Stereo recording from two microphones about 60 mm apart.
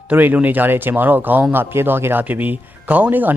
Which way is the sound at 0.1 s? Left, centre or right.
Right.